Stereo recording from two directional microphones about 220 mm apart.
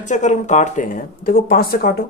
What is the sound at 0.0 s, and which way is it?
Speech, 35° left (ahead or behind).